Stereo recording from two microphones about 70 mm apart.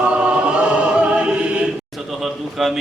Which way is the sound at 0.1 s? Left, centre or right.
Centre.